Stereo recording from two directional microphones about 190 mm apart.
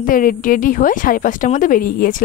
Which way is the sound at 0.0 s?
45° left (ahead or behind).